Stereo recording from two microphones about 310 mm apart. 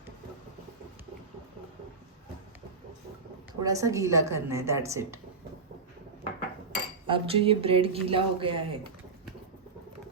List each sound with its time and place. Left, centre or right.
3.6 s speech: centre
7.1 s speech: centre